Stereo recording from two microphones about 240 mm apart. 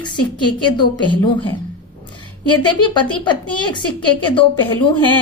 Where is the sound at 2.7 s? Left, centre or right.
Centre.